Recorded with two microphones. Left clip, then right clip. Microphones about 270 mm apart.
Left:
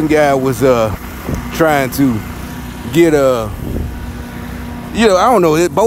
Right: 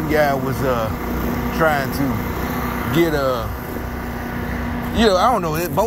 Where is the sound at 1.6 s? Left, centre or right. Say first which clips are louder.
Left 5 dB; left.